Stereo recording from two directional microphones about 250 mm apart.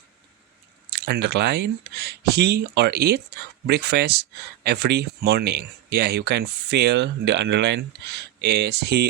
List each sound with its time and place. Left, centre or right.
0.9 s speech: right